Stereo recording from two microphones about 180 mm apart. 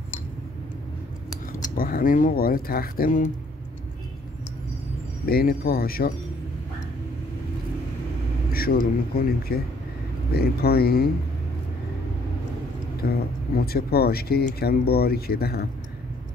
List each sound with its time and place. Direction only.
1.8 s speech: 55° left (ahead or behind)
5.2 s speech: 55° left (ahead or behind)
8.5 s speech: 55° left (ahead or behind)
13.0 s speech: 60° left (ahead or behind)